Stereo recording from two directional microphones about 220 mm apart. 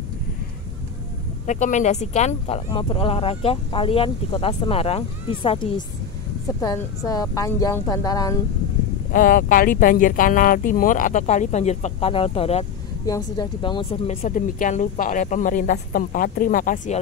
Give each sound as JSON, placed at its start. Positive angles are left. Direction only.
{"t": 1.4, "sound": "speech", "side_deg": 35}
{"t": 9.1, "sound": "speech", "side_deg": 40}